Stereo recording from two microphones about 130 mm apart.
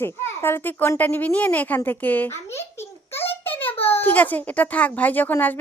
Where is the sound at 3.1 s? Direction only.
15° left (ahead or behind).